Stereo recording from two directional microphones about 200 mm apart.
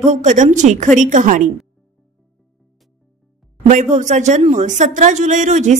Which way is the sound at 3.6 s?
40° right (ahead or behind).